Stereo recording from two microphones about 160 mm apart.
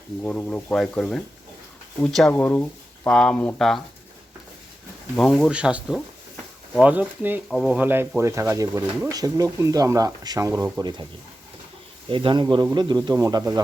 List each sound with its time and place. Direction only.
0.2 s speech: 10° left (ahead or behind)
5.1 s speech: 5° left (ahead or behind)
7.5 s speech: centre (ahead or behind)
7.8 s speech: 10° right (ahead or behind)
12.0 s speech: 30° right (ahead or behind)